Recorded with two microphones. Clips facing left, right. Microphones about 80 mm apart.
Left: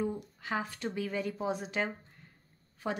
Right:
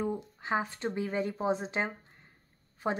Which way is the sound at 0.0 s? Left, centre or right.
Right.